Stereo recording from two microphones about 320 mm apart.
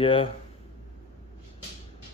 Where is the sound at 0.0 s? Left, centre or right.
Centre.